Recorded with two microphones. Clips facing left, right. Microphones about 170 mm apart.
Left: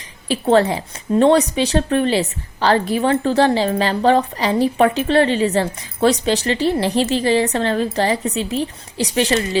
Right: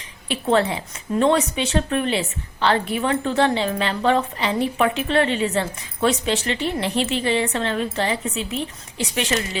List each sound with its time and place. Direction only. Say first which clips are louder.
0.3 s a woman's voice: left 5 dB; 35° left (ahead or behind)